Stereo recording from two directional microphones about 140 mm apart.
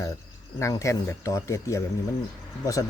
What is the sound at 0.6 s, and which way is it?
Speech, 20° left (ahead or behind).